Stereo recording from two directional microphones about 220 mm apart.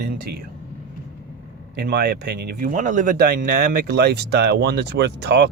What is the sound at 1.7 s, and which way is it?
Speech, 50° right (ahead or behind).